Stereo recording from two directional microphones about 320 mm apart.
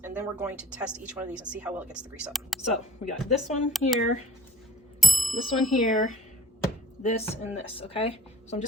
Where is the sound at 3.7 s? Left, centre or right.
Centre.